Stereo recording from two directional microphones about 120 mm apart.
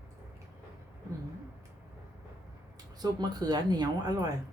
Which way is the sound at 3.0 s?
35° right (ahead or behind).